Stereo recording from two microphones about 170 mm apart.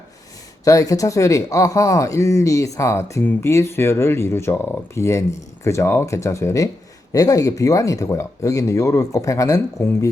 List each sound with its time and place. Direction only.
0.6 s speech: 20° left (ahead or behind)